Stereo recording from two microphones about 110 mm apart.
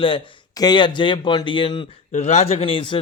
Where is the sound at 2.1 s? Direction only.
90° left; by 2.9 s 50° left (ahead or behind).